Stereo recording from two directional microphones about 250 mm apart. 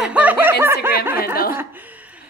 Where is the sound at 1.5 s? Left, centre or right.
Centre.